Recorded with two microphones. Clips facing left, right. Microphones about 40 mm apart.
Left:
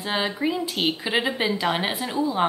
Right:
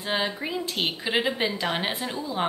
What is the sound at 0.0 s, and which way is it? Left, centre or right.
Speech, centre.